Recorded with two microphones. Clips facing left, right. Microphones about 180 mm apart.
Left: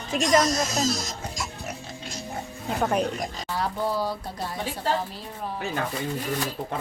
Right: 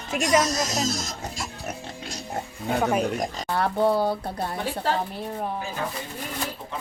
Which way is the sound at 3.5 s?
60° right (ahead or behind).